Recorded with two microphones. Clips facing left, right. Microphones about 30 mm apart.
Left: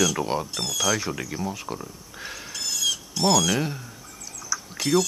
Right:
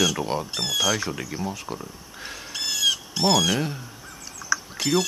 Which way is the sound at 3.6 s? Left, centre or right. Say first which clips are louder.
Even; centre.